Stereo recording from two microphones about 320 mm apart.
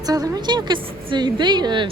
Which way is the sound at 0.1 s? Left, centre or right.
Centre.